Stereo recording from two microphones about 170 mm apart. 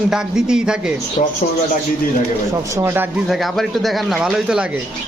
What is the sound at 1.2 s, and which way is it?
Speech, 50° left (ahead or behind).